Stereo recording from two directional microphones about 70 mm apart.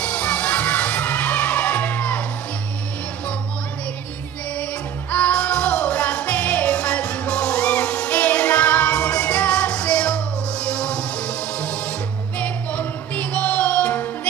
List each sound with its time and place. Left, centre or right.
0.0 s crowd: centre
5.1 s music: centre